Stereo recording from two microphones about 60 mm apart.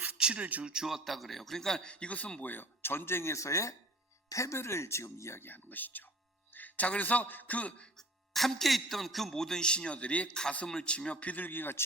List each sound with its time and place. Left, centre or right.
0.2 s a sound: centre
0.4 s speech: right
0.7 s a man's voice: centre; by 3.3 s left
3.3 s speech: left
5.4 s a man's voice: left
7.9 s a man's voice: centre; by 11.8 s left